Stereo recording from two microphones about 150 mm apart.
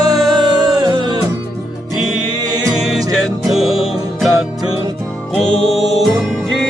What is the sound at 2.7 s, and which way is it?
Music, 5° right (ahead or behind).